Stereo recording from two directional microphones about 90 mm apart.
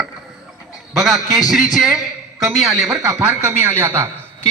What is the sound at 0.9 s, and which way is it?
A man's voice, centre (ahead or behind).